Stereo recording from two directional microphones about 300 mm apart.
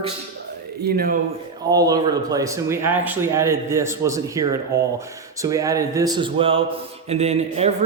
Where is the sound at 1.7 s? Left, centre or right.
Centre.